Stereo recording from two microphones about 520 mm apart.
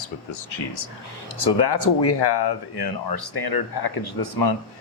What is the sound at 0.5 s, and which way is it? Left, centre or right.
Speech, left.